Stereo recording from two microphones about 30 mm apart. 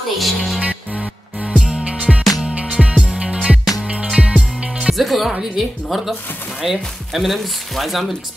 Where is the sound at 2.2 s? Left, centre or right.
Centre.